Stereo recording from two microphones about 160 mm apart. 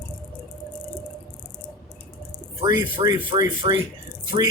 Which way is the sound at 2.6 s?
20° right (ahead or behind).